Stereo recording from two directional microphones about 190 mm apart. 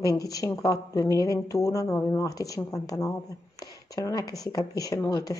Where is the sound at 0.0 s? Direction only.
20° left (ahead or behind).